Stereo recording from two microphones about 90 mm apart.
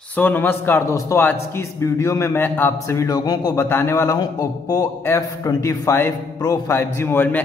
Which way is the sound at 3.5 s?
30° left (ahead or behind).